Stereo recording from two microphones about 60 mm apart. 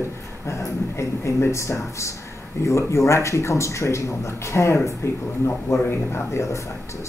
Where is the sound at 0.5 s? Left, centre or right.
Left.